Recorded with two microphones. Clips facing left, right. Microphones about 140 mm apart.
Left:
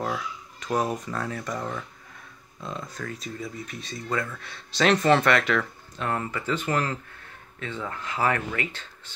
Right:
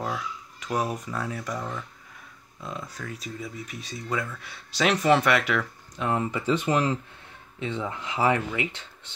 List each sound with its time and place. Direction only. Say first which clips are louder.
0.0 s speech: left 1 dB; 5° right (ahead or behind)